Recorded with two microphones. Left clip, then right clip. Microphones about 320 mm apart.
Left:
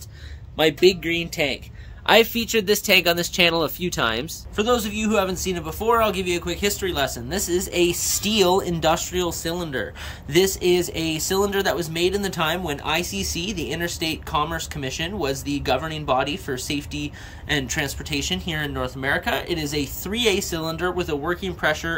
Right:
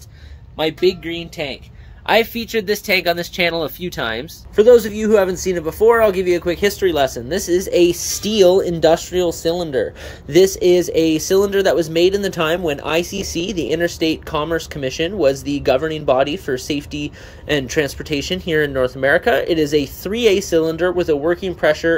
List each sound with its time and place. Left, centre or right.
0.6 s speech: centre
4.6 s speech: centre